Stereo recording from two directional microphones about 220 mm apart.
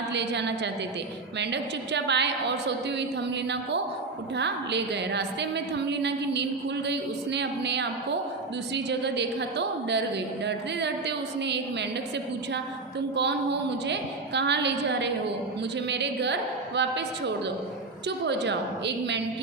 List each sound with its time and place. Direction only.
0.1 s a woman's voice: 50° right (ahead or behind)